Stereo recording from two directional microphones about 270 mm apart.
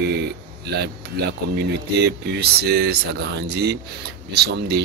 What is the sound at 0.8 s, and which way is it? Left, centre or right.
Speech, right.